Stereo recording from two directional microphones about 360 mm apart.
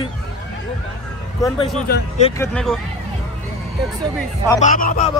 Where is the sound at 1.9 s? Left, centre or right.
Centre.